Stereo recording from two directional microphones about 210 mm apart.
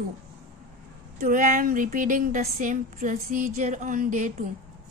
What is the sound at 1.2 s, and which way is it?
A woman's voice, 40° right (ahead or behind).